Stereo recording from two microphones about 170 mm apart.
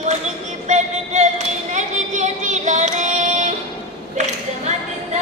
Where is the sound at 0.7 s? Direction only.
40° right (ahead or behind).